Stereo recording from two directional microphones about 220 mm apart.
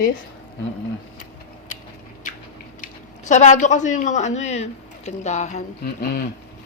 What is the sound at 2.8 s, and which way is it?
Speech, 30° left (ahead or behind).